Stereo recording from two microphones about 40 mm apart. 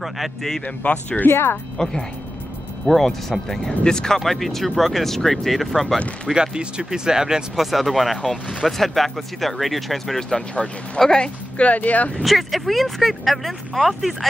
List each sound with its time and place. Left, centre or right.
0.8 s speech: left
1.2 s speech: left
1.8 s speech: centre
4.2 s speech: centre
6.3 s speech: centre
7.6 s speech: centre
11.0 s speech: centre
11.5 s speech: left
12.2 s speech: centre